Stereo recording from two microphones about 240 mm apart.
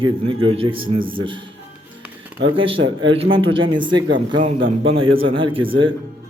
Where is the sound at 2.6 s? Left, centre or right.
Right.